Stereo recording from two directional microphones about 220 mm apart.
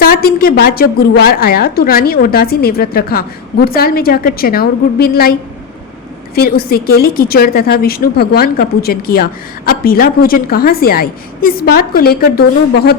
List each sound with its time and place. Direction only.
0.0 s a woman's voice: 40° left (ahead or behind)
6.3 s a woman's voice: 45° left (ahead or behind)